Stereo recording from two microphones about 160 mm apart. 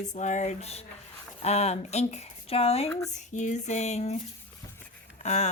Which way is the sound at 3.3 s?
50° left (ahead or behind).